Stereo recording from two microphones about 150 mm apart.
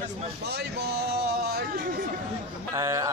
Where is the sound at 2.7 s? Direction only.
20° right (ahead or behind).